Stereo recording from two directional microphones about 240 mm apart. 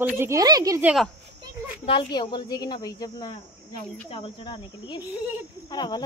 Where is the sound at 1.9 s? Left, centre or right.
Centre.